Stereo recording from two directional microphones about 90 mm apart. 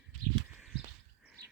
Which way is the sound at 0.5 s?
5° right (ahead or behind).